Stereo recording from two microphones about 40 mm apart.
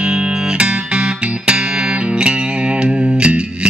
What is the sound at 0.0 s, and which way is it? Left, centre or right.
Music, right.